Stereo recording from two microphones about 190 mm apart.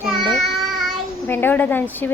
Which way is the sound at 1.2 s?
10° left (ahead or behind).